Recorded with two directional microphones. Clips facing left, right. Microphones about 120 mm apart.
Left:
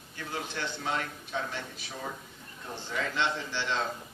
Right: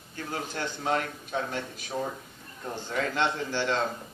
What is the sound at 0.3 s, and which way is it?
A man's voice, 45° right (ahead or behind).